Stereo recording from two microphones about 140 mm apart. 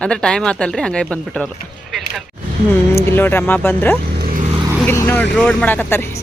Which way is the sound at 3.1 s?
15° left (ahead or behind).